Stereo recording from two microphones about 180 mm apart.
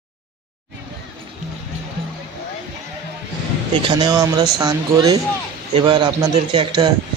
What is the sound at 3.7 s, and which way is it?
A man's voice, 25° right (ahead or behind).